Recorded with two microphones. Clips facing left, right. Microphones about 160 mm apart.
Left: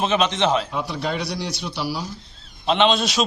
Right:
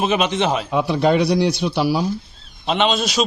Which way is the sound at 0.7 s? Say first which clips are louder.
Right 9 dB; 65° right (ahead or behind).